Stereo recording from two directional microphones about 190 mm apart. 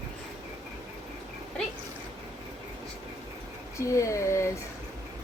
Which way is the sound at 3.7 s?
15° left (ahead or behind).